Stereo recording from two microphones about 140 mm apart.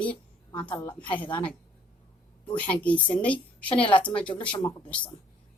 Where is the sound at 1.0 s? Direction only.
35° left (ahead or behind).